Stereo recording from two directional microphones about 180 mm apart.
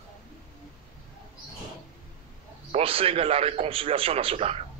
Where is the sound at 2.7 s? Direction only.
35° right (ahead or behind).